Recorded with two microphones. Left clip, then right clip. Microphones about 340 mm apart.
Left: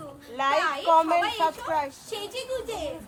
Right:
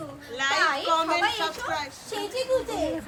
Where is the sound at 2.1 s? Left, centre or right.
Centre.